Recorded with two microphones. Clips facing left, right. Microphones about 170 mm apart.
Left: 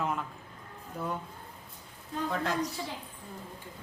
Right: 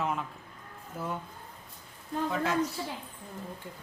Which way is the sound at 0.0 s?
Centre (ahead or behind).